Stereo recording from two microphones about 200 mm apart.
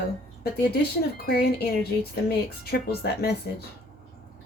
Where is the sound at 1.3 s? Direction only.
50° left (ahead or behind).